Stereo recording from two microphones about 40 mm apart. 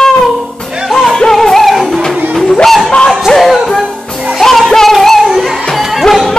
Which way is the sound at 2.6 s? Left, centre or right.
Centre.